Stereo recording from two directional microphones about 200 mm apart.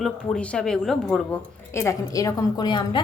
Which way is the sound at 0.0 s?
5° left (ahead or behind).